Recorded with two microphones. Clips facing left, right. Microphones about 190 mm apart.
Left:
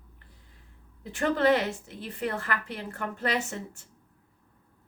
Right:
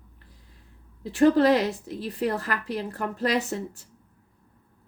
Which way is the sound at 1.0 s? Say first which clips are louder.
Right 6 dB; 35° right (ahead or behind).